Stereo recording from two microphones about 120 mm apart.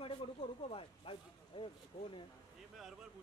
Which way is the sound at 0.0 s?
50° left (ahead or behind).